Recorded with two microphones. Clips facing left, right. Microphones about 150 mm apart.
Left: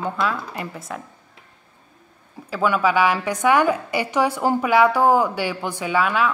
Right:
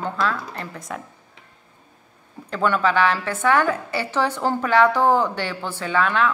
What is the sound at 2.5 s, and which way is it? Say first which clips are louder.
A woman's voice: left 1 dB; 10° left (ahead or behind).